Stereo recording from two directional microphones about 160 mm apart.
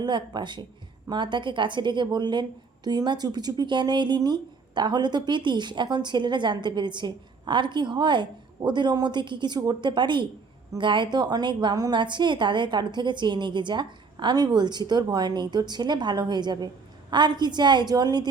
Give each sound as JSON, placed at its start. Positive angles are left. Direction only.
{"t": 0.0, "sound": "a woman's voice", "side_deg": -30}